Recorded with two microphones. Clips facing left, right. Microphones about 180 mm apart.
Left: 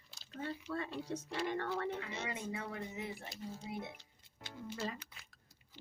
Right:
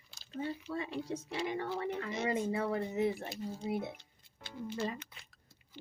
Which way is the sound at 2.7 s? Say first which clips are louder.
Right 11 dB; 35° right (ahead or behind).